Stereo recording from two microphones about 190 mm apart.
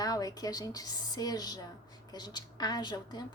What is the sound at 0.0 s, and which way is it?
A woman's voice, 20° left (ahead or behind).